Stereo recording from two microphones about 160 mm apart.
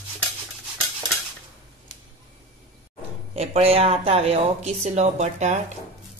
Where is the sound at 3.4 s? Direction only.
40° right (ahead or behind).